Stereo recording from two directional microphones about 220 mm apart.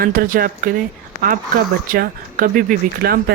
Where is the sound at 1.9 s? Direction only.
40° right (ahead or behind).